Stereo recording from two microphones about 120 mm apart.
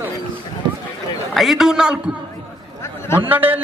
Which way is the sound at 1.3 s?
Centre (ahead or behind).